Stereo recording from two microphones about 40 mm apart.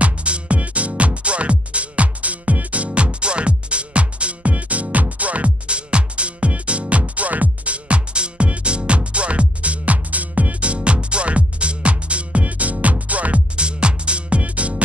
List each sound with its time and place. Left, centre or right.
0.0 s music: right